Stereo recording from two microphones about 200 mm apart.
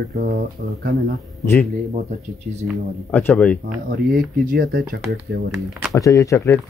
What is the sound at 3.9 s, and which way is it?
Speech, 45° right (ahead or behind).